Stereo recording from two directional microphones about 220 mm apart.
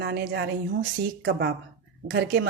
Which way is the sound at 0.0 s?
50° right (ahead or behind).